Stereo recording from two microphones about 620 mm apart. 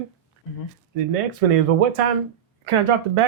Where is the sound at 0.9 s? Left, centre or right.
Right.